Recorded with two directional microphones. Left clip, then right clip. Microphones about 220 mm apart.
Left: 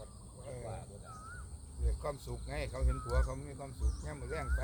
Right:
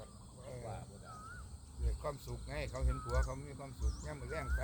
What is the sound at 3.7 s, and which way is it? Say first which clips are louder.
Speech: left 1 dB; 50° right (ahead or behind).